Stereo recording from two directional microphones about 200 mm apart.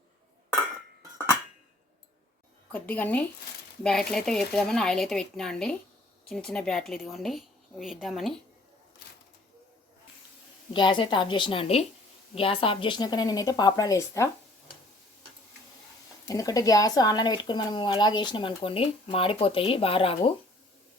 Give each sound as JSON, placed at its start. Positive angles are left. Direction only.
{"t": 2.7, "sound": "a woman's voice", "side_deg": 10}
{"t": 10.8, "sound": "speech", "side_deg": 25}
{"t": 16.2, "sound": "speech", "side_deg": 15}